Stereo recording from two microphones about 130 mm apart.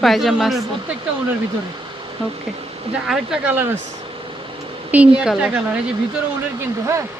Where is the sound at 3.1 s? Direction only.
5° right (ahead or behind).